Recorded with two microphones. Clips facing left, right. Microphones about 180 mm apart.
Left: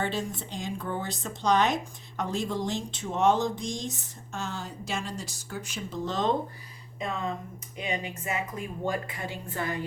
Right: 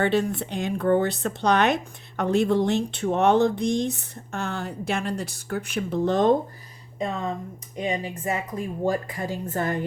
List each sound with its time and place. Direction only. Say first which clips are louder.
0.0 s speech: right 8 dB; 65° right (ahead or behind)
7.8 s a woman's voice: right 5 dB; 35° right (ahead or behind)